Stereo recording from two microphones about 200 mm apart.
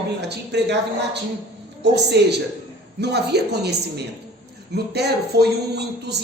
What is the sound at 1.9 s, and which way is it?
A woman's voice, 55° right (ahead or behind).